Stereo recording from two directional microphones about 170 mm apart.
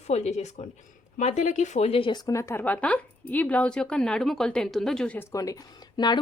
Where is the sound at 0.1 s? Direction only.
40° left (ahead or behind); by 5.2 s 5° left (ahead or behind).